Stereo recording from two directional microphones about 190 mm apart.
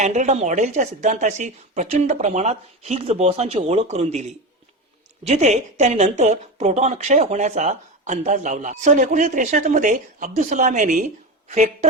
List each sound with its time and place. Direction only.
0.0 s a woman's voice: 40° right (ahead or behind)